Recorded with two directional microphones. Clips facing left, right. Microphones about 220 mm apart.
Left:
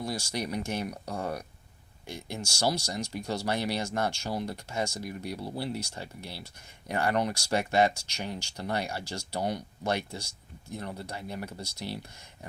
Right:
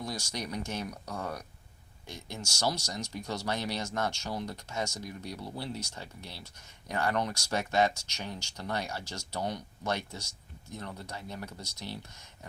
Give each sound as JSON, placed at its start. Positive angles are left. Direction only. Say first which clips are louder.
{"t": 0.0, "sound": "speech", "louder": "left 4 dB", "side_deg": 10}
{"t": 0.9, "sound": "speech", "louder": "left 4 dB", "side_deg": 30}
{"t": 2.0, "sound": "speech", "louder": "left 4 dB", "side_deg": 10}